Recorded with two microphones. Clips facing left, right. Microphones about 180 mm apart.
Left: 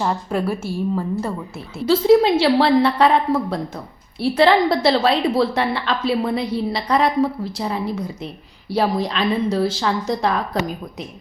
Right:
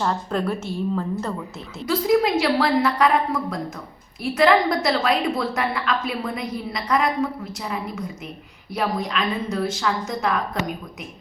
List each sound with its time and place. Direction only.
0.0 s a woman's voice: 10° left (ahead or behind)
1.9 s a woman's voice: 30° left (ahead or behind)